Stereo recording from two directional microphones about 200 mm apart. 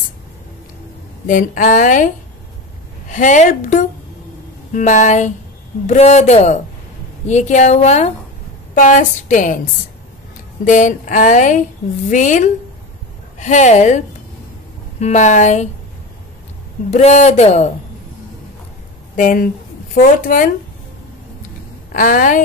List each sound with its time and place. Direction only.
1.2 s speech: 40° left (ahead or behind)
3.1 s speech: 35° left (ahead or behind)
10.6 s speech: 40° left (ahead or behind)
16.9 s speech: 35° left (ahead or behind)
19.1 s a woman's voice: 45° left (ahead or behind)
21.9 s speech: 45° left (ahead or behind)